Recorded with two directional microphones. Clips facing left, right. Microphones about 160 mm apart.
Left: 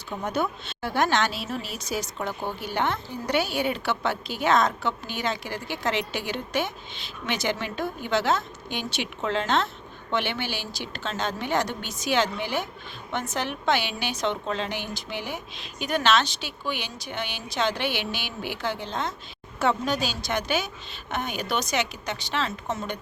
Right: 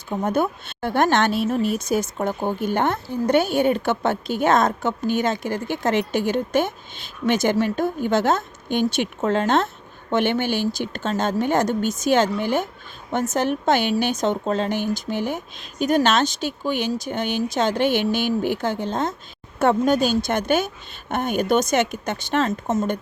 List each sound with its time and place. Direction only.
0.1 s a woman's voice: 45° right (ahead or behind)